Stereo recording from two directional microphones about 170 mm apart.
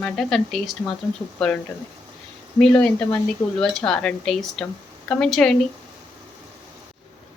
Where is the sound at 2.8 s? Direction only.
5° left (ahead or behind).